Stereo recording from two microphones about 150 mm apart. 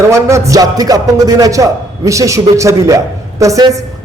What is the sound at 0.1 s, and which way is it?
A man's voice, 20° right (ahead or behind).